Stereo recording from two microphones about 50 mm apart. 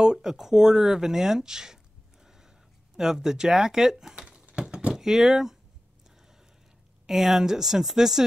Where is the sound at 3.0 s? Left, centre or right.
Centre.